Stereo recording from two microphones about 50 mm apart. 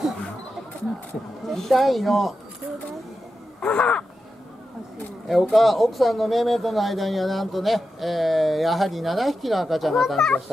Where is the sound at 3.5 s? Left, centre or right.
Left.